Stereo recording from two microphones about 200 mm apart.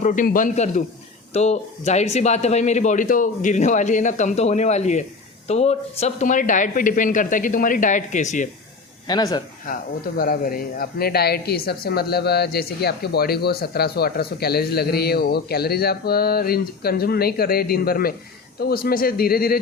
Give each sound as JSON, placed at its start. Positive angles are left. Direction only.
{"t": 0.0, "sound": "speech", "side_deg": 40}
{"t": 9.0, "sound": "speech", "side_deg": 20}
{"t": 9.7, "sound": "a woman's voice", "side_deg": 45}